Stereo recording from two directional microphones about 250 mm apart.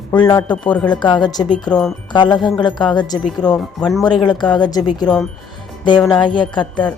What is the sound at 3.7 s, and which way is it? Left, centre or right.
Speech, centre.